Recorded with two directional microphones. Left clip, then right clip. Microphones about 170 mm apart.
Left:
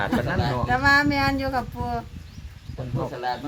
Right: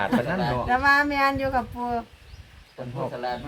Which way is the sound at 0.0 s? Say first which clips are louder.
Even; centre (ahead or behind).